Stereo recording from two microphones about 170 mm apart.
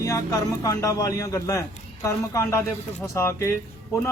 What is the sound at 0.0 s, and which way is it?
A man's voice, 20° left (ahead or behind).